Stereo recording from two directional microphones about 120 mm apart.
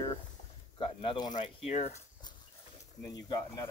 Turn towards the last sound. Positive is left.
turn(degrees=30)  # may be behind; listen again after turning